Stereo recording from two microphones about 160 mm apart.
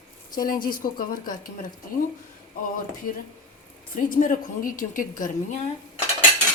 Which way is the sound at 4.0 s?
55° left (ahead or behind).